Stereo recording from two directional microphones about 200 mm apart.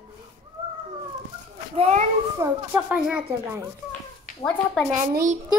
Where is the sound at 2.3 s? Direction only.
10° right (ahead or behind).